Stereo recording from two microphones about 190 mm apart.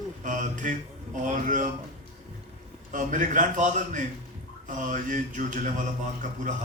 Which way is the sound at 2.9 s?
40° right (ahead or behind).